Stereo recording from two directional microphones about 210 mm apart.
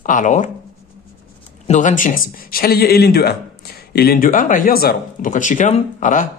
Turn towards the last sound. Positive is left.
turn(degrees=40)  # may be behind; listen again after turning